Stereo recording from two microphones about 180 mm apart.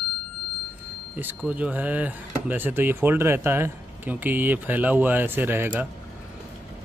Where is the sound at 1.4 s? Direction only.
5° right (ahead or behind).